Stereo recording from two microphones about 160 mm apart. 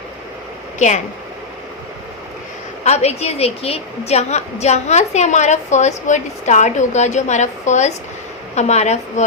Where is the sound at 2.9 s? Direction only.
40° left (ahead or behind).